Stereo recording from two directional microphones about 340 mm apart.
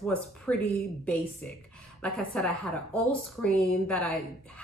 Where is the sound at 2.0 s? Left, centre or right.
Centre.